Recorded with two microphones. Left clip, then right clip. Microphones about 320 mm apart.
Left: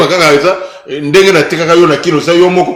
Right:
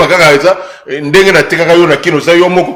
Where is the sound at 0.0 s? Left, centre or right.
Right.